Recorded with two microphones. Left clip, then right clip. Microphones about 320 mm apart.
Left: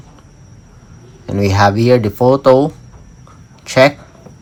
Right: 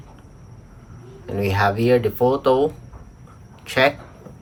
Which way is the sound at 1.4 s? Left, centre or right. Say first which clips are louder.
Left 7 dB; centre.